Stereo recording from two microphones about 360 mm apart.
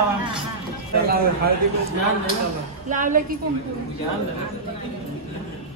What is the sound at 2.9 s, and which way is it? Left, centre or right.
Speech, right.